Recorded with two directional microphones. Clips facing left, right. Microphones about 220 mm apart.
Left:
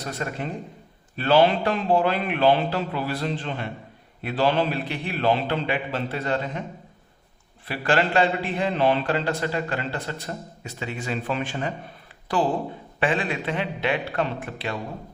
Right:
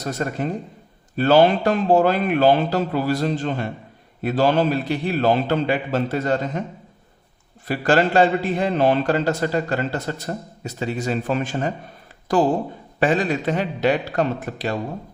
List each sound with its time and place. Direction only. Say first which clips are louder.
0.1 s a man's voice: right 6 dB; 45° right (ahead or behind)
7.7 s a man's voice: right 5 dB; 40° right (ahead or behind)